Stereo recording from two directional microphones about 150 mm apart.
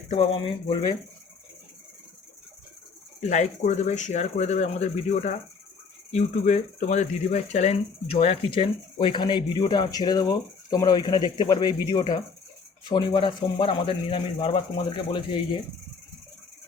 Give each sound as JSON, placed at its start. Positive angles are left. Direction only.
{"t": 0.1, "sound": "speech", "side_deg": 40}
{"t": 3.2, "sound": "a man's voice", "side_deg": 50}